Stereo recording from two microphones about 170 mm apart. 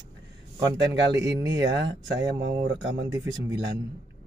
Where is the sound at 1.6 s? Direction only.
90° right.